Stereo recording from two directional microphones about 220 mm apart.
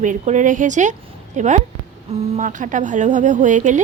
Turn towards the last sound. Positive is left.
turn(degrees=-35)  # may be behind; listen again after turning